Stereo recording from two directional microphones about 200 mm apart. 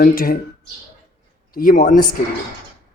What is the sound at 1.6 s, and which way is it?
Bird, 40° left (ahead or behind).